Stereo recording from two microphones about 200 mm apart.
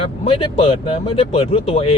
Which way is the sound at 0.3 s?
25° left (ahead or behind).